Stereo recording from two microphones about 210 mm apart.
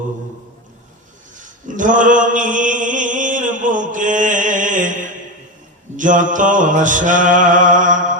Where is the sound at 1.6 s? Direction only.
40° right (ahead or behind).